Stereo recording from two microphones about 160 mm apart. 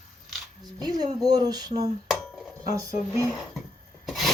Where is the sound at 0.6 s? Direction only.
25° right (ahead or behind).